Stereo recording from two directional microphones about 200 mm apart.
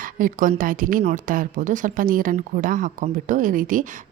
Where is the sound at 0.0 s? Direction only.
45° right (ahead or behind).